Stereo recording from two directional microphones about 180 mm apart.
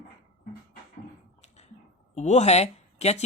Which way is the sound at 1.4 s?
40° left (ahead or behind).